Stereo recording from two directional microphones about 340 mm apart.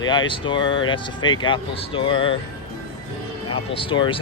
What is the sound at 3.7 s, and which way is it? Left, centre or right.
Speech, centre.